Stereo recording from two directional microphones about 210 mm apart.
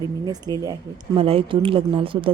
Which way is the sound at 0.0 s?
20° right (ahead or behind).